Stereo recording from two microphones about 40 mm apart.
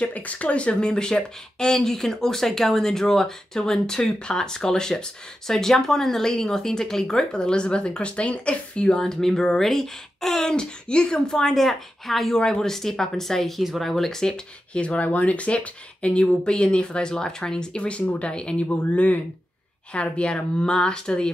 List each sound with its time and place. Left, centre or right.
0.0 s speech: left
8.9 s speech: centre
10.5 s speech: left
14.7 s speech: left
18.8 s speech: left
19.9 s speech: left